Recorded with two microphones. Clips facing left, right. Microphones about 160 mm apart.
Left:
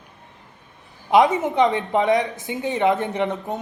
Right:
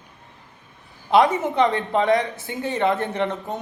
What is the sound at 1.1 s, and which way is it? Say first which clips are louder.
A man's voice: left 1 dB; 20° left (ahead or behind).